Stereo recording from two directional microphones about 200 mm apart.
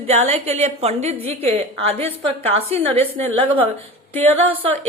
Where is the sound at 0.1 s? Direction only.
35° right (ahead or behind).